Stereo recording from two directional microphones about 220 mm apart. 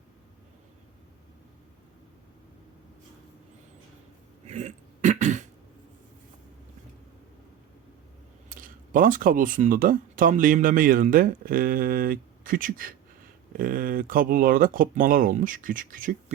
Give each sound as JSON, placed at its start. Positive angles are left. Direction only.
{"t": 4.4, "sound": "throat clearing", "side_deg": -30}
{"t": 8.4, "sound": "speech", "side_deg": -40}